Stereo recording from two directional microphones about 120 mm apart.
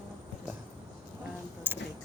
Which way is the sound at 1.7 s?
15° right (ahead or behind).